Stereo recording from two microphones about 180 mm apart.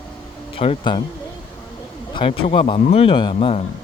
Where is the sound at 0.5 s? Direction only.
30° left (ahead or behind).